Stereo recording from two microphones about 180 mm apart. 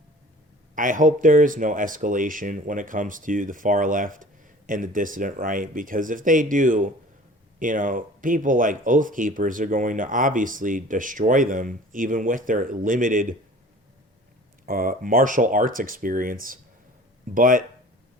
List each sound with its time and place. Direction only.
0.8 s speech: 45° right (ahead or behind)
14.7 s speech: 50° right (ahead or behind)